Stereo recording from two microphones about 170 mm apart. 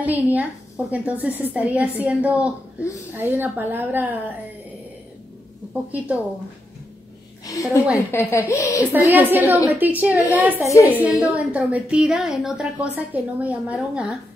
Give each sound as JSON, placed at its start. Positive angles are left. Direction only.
{"t": 0.0, "sound": "a woman's voice", "side_deg": -10}
{"t": 5.7, "sound": "a woman's voice", "side_deg": -10}
{"t": 7.9, "sound": "a woman's voice", "side_deg": 15}
{"t": 9.1, "sound": "a woman's voice", "side_deg": -10}
{"t": 10.7, "sound": "a woman's voice", "side_deg": 20}
{"t": 11.0, "sound": "a woman's voice", "side_deg": -10}